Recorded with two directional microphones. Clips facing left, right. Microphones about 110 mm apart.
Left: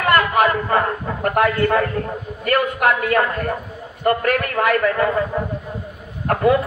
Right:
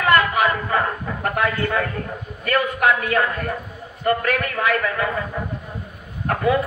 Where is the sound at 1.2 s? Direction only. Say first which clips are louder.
Left 5 dB; 50° left (ahead or behind).